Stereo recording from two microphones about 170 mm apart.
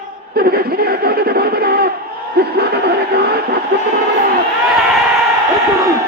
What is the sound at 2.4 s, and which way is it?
Snicker, 70° right (ahead or behind).